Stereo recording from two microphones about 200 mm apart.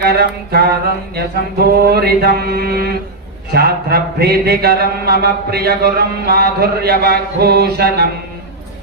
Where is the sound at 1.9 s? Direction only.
50° right (ahead or behind).